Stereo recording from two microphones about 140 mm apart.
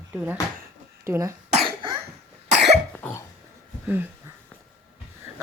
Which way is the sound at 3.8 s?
15° right (ahead or behind).